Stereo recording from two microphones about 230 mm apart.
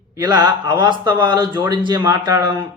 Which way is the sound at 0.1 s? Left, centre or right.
Centre.